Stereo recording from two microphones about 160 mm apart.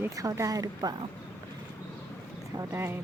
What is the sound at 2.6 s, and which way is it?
Speech, 15° right (ahead or behind).